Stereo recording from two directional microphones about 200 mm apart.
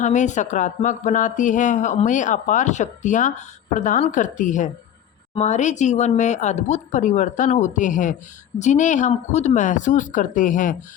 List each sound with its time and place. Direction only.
0.0 s speech: 35° left (ahead or behind)